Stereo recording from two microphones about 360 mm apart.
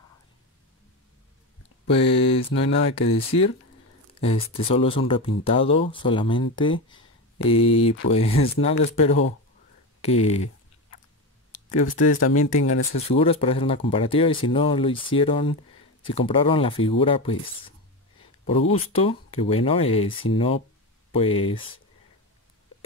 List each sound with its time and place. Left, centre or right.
2.0 s speech: centre
8.9 s speech: centre
11.8 s speech: left
13.1 s speech: centre